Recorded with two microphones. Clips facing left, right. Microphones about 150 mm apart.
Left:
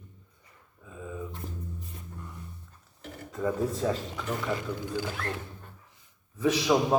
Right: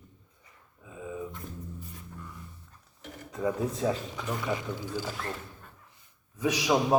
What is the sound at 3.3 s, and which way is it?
Speech, 15° right (ahead or behind).